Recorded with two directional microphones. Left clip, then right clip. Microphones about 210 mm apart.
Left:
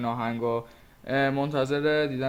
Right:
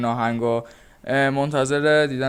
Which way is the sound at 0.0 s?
45° right (ahead or behind).